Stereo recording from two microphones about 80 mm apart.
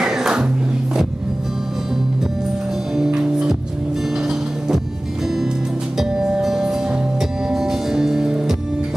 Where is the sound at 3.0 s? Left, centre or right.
Centre.